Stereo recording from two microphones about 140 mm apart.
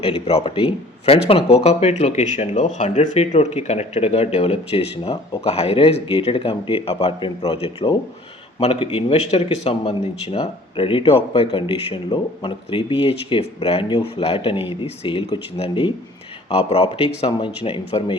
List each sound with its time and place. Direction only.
0.0 s speech: 45° left (ahead or behind)